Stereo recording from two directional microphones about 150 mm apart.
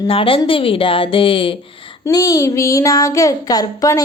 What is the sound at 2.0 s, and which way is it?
A woman's voice, 20° left (ahead or behind).